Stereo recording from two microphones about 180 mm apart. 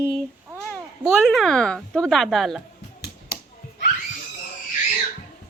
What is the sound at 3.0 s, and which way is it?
Finger snapping, 65° left (ahead or behind).